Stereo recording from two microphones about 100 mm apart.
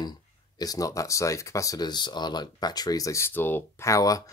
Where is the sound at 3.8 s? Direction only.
35° left (ahead or behind).